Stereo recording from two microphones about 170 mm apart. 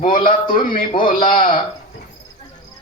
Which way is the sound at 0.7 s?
30° left (ahead or behind).